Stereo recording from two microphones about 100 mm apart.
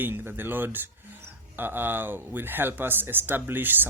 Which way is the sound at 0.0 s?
20° right (ahead or behind).